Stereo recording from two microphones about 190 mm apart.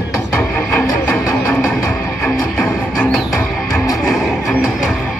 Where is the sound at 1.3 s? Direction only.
5° left (ahead or behind).